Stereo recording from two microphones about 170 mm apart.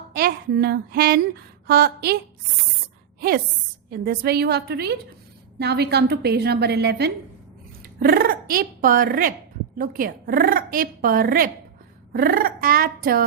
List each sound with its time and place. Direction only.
0.1 s a woman's voice: 65° right (ahead or behind)
3.2 s a woman's voice: 65° right (ahead or behind)
7.9 s a woman's voice: 60° right (ahead or behind)